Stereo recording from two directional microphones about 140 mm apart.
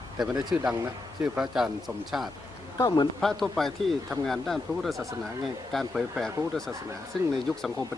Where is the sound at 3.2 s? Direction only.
Centre (ahead or behind).